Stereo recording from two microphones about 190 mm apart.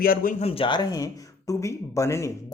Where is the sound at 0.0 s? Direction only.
50° left (ahead or behind).